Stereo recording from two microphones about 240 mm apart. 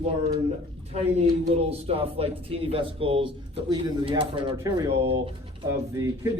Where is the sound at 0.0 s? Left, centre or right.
Right.